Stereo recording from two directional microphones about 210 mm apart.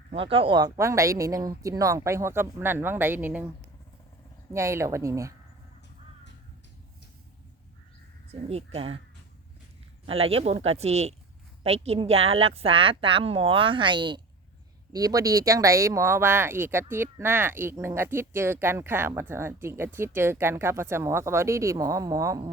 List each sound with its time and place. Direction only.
0.1 s speech: 25° right (ahead or behind); by 3.4 s 10° right (ahead or behind)
4.5 s speech: 15° right (ahead or behind)
8.3 s a woman's voice: 30° right (ahead or behind)
10.1 s a woman's voice: 30° right (ahead or behind)